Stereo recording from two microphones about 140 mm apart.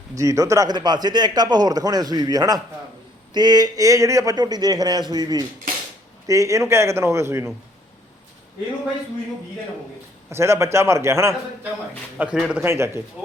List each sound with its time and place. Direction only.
0.2 s a man's voice: 25° right (ahead or behind)
10.2 s a man's voice: 20° right (ahead or behind)
12.1 s speech: 5° right (ahead or behind)
12.6 s a man's voice: 20° right (ahead or behind)